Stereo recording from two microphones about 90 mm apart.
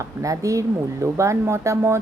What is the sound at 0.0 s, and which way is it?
Speech, 35° right (ahead or behind).